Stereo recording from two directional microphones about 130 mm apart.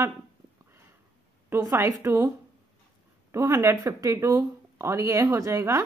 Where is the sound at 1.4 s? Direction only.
15° right (ahead or behind).